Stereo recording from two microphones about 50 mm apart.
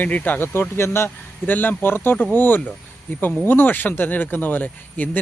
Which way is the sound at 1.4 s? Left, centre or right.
Left.